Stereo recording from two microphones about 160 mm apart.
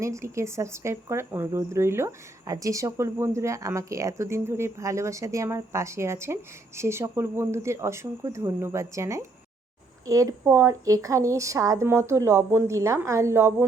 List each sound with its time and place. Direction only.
0.0 s speech: 20° right (ahead or behind)